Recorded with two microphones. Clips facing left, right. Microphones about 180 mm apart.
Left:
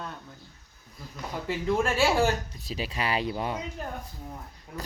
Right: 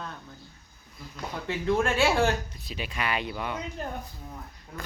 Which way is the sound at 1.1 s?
5° left (ahead or behind).